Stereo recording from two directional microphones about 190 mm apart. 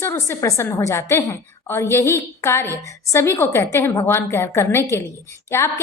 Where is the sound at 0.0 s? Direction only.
15° left (ahead or behind).